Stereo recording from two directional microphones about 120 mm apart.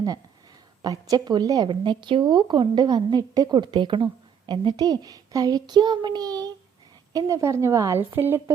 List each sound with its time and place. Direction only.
0.8 s a woman's voice: 30° right (ahead or behind)